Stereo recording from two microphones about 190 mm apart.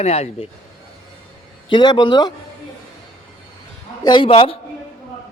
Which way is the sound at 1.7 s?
25° left (ahead or behind).